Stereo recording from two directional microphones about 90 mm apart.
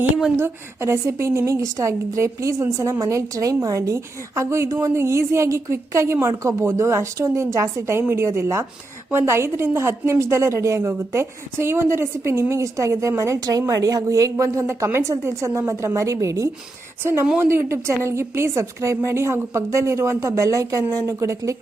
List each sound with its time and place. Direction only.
0.3 s a woman's voice: 30° right (ahead or behind)